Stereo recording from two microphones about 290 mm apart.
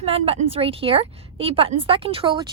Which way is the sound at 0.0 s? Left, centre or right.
Centre.